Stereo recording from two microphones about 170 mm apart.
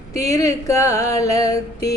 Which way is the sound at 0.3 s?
20° left (ahead or behind).